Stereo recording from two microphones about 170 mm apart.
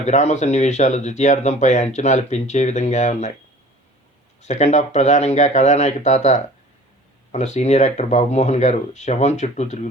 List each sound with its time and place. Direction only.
0.0 s speech: 45° left (ahead or behind)
4.4 s speech: 45° left (ahead or behind)